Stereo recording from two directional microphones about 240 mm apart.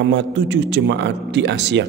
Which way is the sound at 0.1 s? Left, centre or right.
Right.